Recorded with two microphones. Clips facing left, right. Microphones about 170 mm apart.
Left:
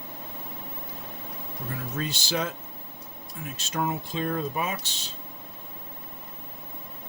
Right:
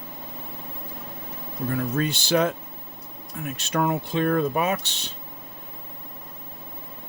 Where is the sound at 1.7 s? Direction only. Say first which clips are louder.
Right 7 dB; 60° right (ahead or behind).